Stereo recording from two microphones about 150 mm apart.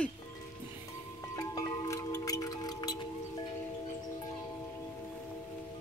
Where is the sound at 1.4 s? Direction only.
25° left (ahead or behind).